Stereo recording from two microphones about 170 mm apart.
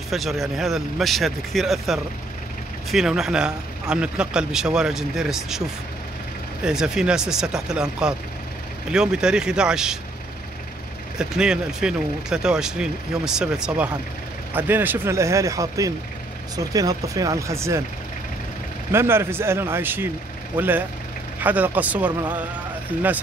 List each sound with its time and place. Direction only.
0.1 s speech: centre (ahead or behind)
6.6 s speech: 5° right (ahead or behind)
11.1 s speech: 5° right (ahead or behind)
18.9 s speech: 15° right (ahead or behind)